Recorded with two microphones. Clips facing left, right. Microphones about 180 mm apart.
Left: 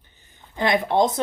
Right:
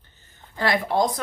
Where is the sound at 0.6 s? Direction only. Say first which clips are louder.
Left 2 dB; 20° left (ahead or behind).